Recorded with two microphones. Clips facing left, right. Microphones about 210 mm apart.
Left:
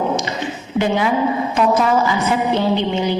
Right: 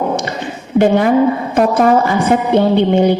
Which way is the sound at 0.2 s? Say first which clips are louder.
Right 2 dB; 55° right (ahead or behind).